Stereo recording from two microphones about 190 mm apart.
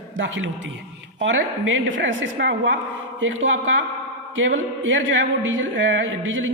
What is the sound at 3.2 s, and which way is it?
Speech, 90° right.